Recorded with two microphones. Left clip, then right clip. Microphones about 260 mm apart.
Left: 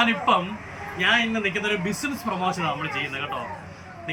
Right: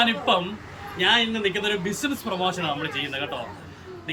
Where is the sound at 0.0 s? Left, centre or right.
Centre.